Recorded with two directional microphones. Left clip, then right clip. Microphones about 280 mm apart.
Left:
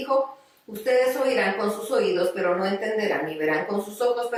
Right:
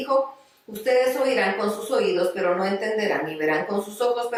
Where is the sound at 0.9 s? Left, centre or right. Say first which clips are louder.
Right 1 dB; centre.